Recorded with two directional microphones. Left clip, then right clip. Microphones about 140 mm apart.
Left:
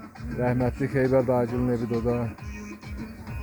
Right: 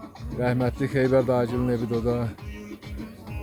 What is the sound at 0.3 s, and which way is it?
Speech, 10° right (ahead or behind).